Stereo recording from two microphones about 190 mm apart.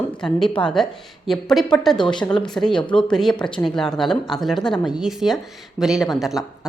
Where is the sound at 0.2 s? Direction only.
5° left (ahead or behind).